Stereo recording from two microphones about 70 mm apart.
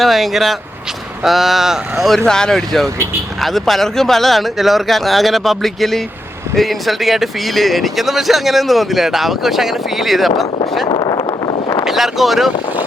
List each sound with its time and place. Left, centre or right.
0.0 s speech: centre
11.0 s vehicle: left
11.9 s speech: centre